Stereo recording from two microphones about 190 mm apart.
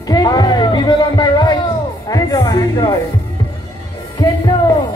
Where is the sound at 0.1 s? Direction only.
20° left (ahead or behind).